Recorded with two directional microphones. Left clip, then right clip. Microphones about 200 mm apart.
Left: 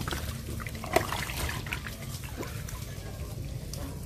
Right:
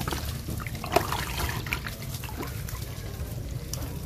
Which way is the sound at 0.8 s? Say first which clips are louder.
Right 2 dB; 5° left (ahead or behind).